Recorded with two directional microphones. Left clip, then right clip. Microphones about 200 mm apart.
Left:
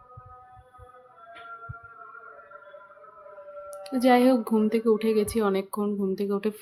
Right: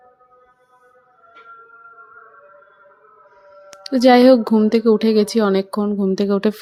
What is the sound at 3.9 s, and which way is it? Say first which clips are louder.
A woman's voice: right 10 dB; 35° right (ahead or behind).